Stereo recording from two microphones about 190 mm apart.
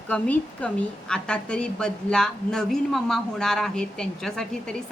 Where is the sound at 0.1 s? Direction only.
5° left (ahead or behind).